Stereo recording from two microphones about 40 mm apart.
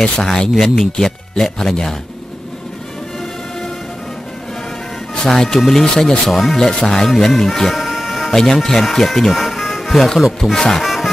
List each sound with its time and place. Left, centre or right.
0.0 s speech: centre
5.1 s speech: centre
6.6 s speech: centre
7.7 s music: centre
8.3 s speech: centre
9.0 s music: centre
10.5 s speech: centre
10.8 s music: centre